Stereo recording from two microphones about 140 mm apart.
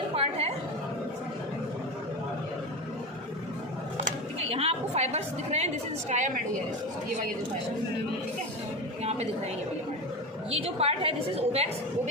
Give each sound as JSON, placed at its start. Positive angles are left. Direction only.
{"t": 0.1, "sound": "chatter", "side_deg": -45}
{"t": 4.4, "sound": "a woman's voice", "side_deg": -45}
{"t": 10.5, "sound": "a woman's voice", "side_deg": -45}